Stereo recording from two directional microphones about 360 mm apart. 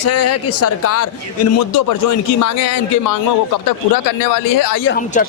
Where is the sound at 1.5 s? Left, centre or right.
Left.